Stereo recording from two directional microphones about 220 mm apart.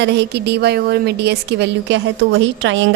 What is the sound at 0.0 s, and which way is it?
A woman's voice, 50° right (ahead or behind).